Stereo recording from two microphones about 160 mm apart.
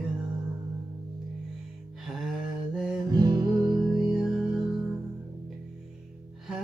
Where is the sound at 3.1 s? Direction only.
25° right (ahead or behind).